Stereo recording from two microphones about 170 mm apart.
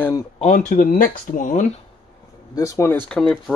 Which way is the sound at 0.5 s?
55° left (ahead or behind).